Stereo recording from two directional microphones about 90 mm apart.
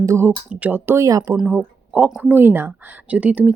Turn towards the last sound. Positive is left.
turn(degrees=-15)  # may be behind; listen again after turning